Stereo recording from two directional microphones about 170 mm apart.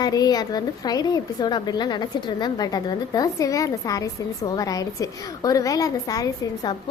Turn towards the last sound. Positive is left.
turn(degrees=20)  # may be behind; listen again after turning